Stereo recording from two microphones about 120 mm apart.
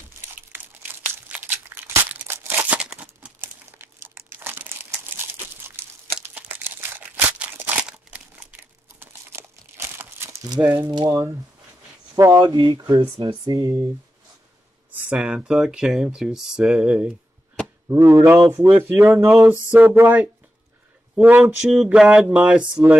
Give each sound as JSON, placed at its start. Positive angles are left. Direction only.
{"t": 0.2, "sound": "crumpling", "side_deg": -15}
{"t": 3.3, "sound": "crumpling", "side_deg": -20}
{"t": 6.2, "sound": "crumpling", "side_deg": -15}
{"t": 10.6, "sound": "speech", "side_deg": -15}
{"t": 10.9, "sound": "speech", "side_deg": -35}
{"t": 12.4, "sound": "speech", "side_deg": -35}
{"t": 15.0, "sound": "speech", "side_deg": -10}
{"t": 18.1, "sound": "speech", "side_deg": -25}